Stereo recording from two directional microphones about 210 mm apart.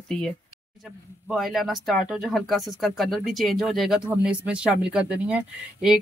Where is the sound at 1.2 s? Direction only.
Centre (ahead or behind).